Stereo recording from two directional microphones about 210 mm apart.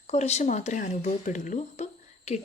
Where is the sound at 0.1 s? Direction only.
30° left (ahead or behind).